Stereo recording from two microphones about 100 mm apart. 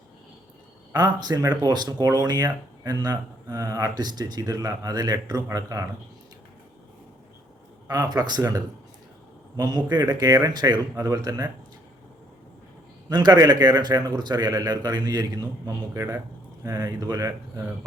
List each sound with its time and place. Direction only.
0.9 s speech: 40° right (ahead or behind)
7.9 s speech: 40° right (ahead or behind)
13.1 s speech: 45° right (ahead or behind)